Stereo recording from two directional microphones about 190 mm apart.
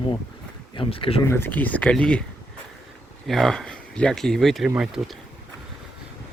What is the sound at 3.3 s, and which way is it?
Speech, centre (ahead or behind).